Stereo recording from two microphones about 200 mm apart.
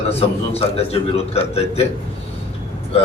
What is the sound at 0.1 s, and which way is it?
A man's voice, 30° left (ahead or behind).